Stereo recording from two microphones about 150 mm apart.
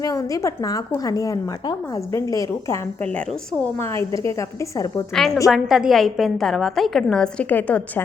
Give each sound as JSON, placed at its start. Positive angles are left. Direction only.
{"t": 0.0, "sound": "a woman's voice", "side_deg": 25}
{"t": 3.0, "sound": "a woman's voice", "side_deg": 10}
{"t": 5.1, "sound": "a woman's voice", "side_deg": 0}